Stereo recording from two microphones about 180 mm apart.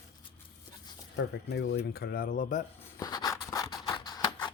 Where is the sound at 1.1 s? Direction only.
75° left (ahead or behind).